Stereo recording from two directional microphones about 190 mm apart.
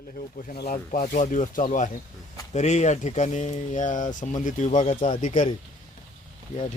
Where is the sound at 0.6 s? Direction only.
40° left (ahead or behind).